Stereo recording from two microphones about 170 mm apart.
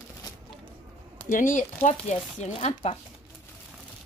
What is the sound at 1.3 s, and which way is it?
Speech, 50° left (ahead or behind).